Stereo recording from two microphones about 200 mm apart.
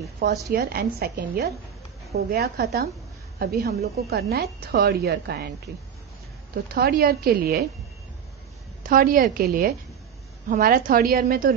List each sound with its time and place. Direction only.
0.5 s a woman's voice: 50° right (ahead or behind)
6.5 s a woman's voice: 50° right (ahead or behind)
8.8 s a woman's voice: 45° right (ahead or behind)